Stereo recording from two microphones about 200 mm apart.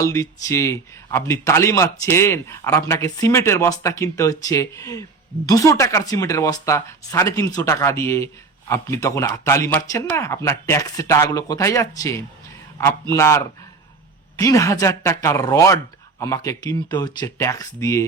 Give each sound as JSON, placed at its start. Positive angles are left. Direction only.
{"t": 0.0, "sound": "a man's voice", "side_deg": 15}